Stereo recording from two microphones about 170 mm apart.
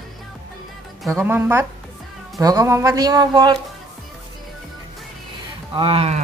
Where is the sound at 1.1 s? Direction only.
15° right (ahead or behind).